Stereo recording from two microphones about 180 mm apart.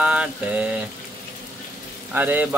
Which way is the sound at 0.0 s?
5° right (ahead or behind).